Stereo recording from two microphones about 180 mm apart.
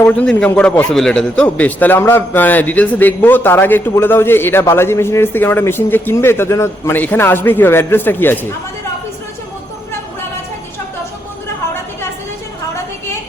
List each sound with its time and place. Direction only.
0.0 s a man's voice: 5° left (ahead or behind)